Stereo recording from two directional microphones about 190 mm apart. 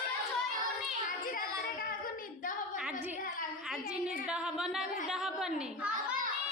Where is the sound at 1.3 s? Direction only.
50° left (ahead or behind).